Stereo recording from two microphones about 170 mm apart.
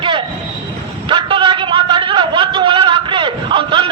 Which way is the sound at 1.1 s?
30° right (ahead or behind).